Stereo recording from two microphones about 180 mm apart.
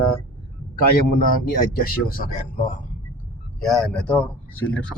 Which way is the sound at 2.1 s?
50° left (ahead or behind).